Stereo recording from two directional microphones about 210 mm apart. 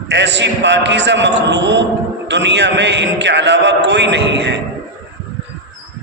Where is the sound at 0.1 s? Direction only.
55° right (ahead or behind).